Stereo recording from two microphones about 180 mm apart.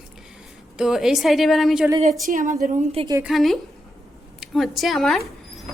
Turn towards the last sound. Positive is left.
turn(degrees=0)  # may be behind; listen again after turning